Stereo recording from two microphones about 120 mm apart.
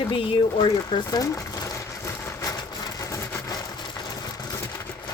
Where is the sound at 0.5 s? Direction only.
40° left (ahead or behind).